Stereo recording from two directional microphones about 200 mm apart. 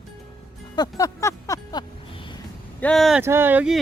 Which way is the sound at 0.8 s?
15° left (ahead or behind).